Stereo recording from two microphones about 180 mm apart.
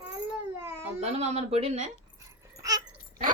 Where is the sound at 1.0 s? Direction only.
35° right (ahead or behind).